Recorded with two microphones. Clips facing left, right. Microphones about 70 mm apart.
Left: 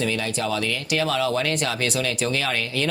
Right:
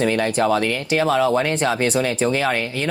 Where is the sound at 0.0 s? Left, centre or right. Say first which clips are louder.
Right 7 dB; right.